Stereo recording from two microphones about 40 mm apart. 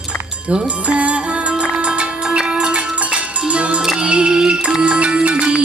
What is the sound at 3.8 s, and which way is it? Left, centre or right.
Music, centre.